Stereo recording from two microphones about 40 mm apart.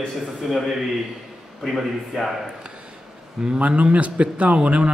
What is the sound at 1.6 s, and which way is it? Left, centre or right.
Speech, centre.